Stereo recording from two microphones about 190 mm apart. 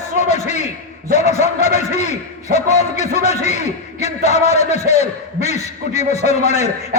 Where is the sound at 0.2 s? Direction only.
35° left (ahead or behind).